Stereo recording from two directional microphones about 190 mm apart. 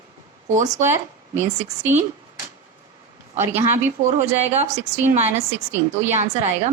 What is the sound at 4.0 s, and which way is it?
A woman's voice, 30° right (ahead or behind).